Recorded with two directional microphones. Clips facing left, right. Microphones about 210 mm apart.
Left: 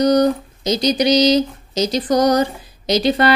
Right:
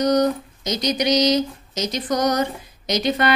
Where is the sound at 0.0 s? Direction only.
30° left (ahead or behind).